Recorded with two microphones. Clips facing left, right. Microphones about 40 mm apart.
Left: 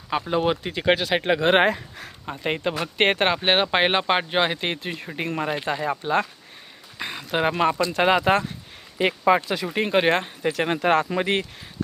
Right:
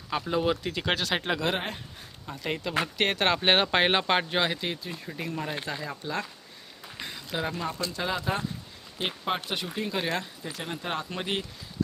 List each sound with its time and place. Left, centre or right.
0.1 s speech: left
1.2 s speech: left
3.3 s speech: centre; by 4.6 s left
4.8 s speech: left
7.0 s a sound: left
7.5 s speech: left
9.8 s speech: left
10.4 s speech: left